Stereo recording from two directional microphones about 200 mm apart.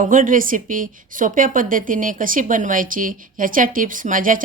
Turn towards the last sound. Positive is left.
turn(degrees=-40)  # may be behind; listen again after turning